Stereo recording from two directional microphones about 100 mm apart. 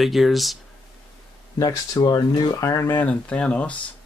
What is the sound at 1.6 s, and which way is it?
Speech, 40° left (ahead or behind).